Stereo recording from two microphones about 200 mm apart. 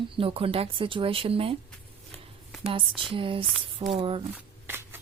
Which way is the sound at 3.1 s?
25° right (ahead or behind).